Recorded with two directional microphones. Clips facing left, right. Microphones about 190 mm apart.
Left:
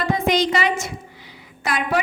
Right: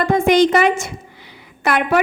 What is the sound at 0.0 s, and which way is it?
A woman's voice, 50° right (ahead or behind).